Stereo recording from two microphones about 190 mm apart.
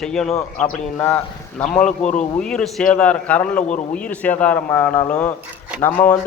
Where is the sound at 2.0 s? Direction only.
40° left (ahead or behind).